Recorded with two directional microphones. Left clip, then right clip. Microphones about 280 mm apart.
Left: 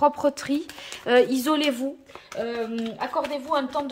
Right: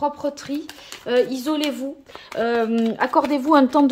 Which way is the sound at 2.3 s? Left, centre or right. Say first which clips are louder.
Right 8 dB; centre.